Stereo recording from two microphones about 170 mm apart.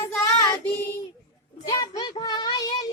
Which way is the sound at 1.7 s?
20° left (ahead or behind).